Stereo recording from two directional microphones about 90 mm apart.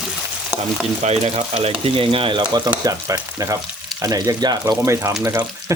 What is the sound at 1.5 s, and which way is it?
Frying, 90° right.